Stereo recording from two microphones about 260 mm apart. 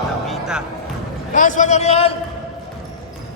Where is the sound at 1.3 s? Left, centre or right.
Left.